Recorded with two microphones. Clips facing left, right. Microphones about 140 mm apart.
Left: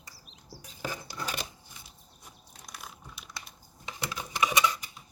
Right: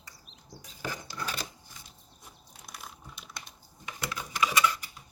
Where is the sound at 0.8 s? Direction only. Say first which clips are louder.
Even; 15° left (ahead or behind).